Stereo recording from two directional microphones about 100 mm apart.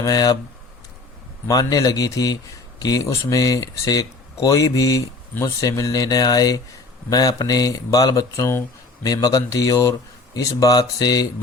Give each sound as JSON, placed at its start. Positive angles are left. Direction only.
{"t": 0.0, "sound": "speech", "side_deg": 40}
{"t": 1.5, "sound": "speech", "side_deg": 40}
{"t": 9.0, "sound": "speech", "side_deg": 40}